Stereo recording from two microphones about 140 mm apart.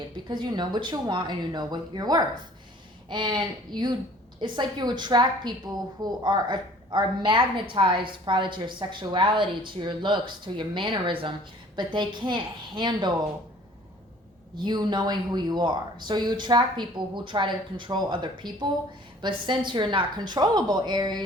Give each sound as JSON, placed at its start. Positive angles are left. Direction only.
{"t": 0.3, "sound": "a woman's voice", "side_deg": -30}
{"t": 14.5, "sound": "a woman's voice", "side_deg": -30}